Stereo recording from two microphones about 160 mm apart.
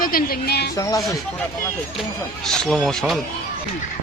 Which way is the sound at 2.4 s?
5° left (ahead or behind).